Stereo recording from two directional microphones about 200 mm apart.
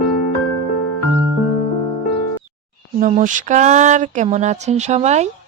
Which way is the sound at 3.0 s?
40° right (ahead or behind).